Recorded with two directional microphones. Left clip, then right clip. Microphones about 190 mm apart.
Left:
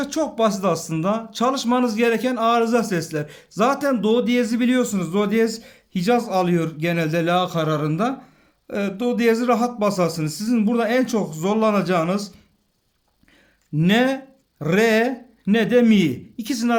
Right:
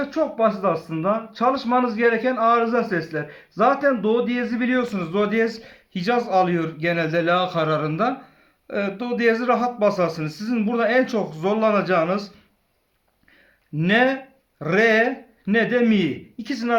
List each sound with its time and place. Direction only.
0.0 s a man's voice: 35° left (ahead or behind)
13.7 s a man's voice: 40° left (ahead or behind)